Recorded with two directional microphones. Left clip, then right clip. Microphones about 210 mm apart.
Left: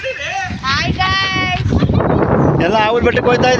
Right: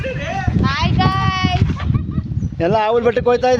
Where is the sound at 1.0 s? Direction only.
30° right (ahead or behind).